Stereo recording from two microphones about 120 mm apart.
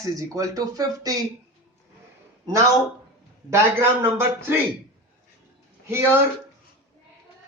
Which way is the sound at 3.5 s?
20° right (ahead or behind).